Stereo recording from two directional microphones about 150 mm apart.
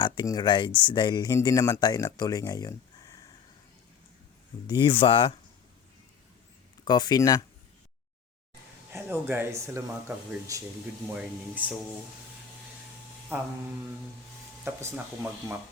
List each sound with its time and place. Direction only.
0.0 s speech: 25° left (ahead or behind)
4.6 s speech: 30° left (ahead or behind)
6.8 s speech: 30° left (ahead or behind)
8.9 s speech: 15° right (ahead or behind)
11.1 s speech: 10° right (ahead or behind)
13.3 s speech: 15° right (ahead or behind)
14.6 s speech: 15° right (ahead or behind)